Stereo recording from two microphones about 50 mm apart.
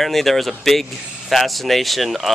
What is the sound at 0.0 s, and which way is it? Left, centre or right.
Speech, centre.